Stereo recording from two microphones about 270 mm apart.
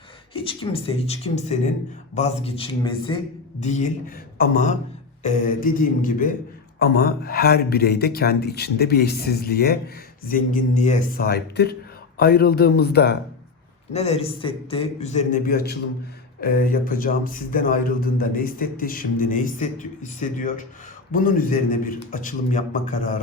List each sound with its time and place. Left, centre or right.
0.3 s a man's voice: centre; by 13.1 s left
13.9 s a man's voice: left